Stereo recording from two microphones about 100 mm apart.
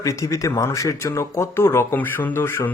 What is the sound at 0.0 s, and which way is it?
Speech, 30° left (ahead or behind).